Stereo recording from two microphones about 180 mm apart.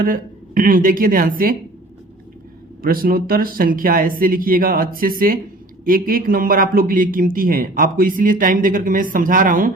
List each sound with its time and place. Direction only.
0.0 s a man's voice: 50° right (ahead or behind)
2.8 s a man's voice: 55° right (ahead or behind)